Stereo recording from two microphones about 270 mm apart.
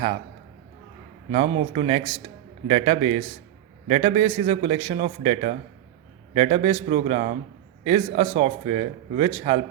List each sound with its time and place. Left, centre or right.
1.3 s a man's voice: right